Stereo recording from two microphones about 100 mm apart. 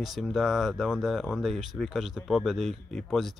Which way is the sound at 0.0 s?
Centre (ahead or behind).